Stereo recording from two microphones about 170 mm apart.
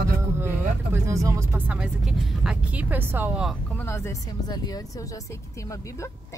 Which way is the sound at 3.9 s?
20° left (ahead or behind).